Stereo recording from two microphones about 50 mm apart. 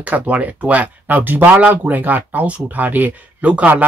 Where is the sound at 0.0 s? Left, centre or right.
Right.